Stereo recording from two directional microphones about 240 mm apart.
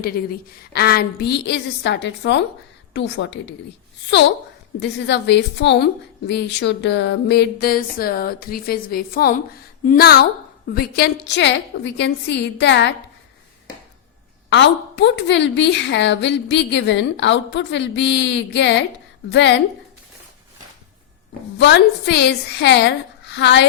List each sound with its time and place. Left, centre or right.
0.0 s a woman's voice: left
4.8 s a woman's voice: left
14.5 s a woman's voice: left
21.6 s a woman's voice: left